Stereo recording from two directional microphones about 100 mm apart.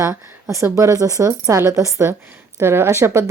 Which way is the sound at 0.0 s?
25° right (ahead or behind).